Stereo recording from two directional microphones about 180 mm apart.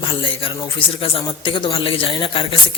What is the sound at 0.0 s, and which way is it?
Speech, 30° left (ahead or behind).